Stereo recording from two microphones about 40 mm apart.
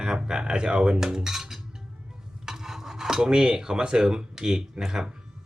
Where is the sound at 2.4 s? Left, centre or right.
Centre.